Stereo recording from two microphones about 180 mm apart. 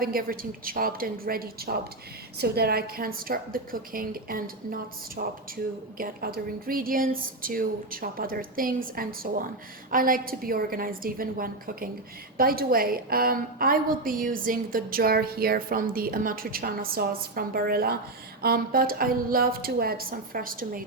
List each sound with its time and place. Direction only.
0.0 s a woman's voice: 55° right (ahead or behind)